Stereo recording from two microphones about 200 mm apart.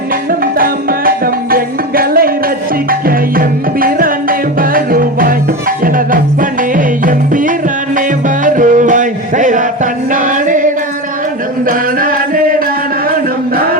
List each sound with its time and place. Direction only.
0.3 s music: 45° right (ahead or behind)
11.7 s music: 45° right (ahead or behind)